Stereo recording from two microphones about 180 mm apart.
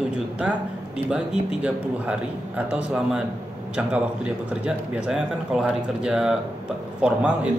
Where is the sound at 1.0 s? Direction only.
5° right (ahead or behind).